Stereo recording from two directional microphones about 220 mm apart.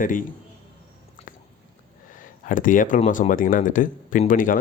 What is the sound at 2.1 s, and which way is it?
Speech, 35° left (ahead or behind).